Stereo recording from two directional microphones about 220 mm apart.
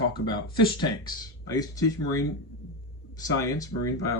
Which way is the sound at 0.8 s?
15° left (ahead or behind).